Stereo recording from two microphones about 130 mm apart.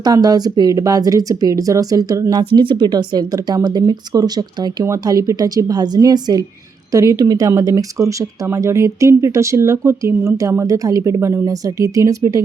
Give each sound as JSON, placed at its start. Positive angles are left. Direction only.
{"t": 0.0, "sound": "speech", "side_deg": -30}
{"t": 2.4, "sound": "speech", "side_deg": -40}